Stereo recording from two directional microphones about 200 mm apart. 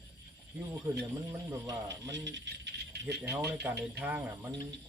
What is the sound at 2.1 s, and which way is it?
Speech, 65° right (ahead or behind).